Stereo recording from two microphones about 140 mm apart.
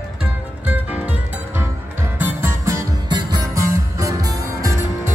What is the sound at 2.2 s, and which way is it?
Music, 20° right (ahead or behind).